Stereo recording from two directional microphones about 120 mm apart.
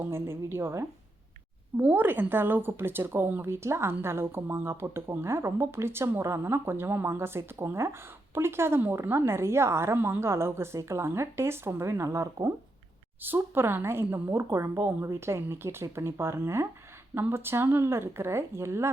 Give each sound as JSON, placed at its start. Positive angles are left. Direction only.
{"t": 0.0, "sound": "speech", "side_deg": -20}